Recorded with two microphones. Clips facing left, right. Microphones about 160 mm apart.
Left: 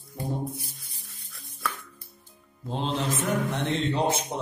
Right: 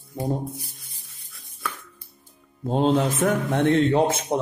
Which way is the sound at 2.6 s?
50° right (ahead or behind).